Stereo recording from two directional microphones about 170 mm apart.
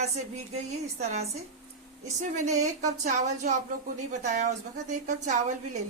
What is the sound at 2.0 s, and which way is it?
A woman's voice, 45° right (ahead or behind).